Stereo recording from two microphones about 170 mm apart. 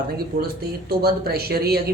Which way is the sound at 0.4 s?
65° right (ahead or behind).